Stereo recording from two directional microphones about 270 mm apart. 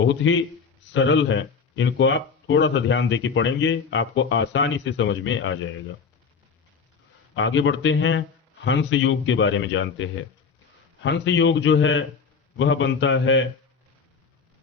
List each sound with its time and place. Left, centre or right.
0.0 s speech: left
7.3 s speech: left